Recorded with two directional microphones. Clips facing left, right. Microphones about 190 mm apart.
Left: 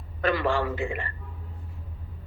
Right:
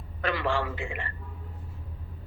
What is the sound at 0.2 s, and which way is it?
Speech, 45° left (ahead or behind).